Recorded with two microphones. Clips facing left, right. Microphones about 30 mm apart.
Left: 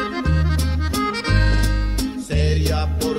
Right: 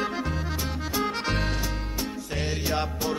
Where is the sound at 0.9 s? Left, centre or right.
Left.